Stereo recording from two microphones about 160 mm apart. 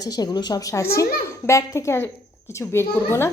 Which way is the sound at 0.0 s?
25° left (ahead or behind).